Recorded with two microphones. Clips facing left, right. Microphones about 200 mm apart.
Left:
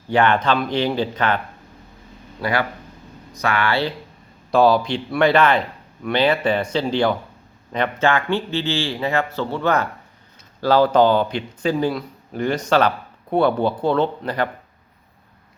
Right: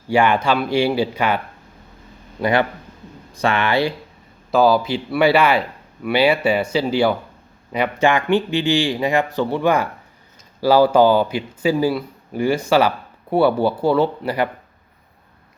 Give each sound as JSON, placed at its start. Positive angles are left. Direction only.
{"t": 0.1, "sound": "speech", "side_deg": -10}
{"t": 2.4, "sound": "speech", "side_deg": -25}
{"t": 4.5, "sound": "speech", "side_deg": 0}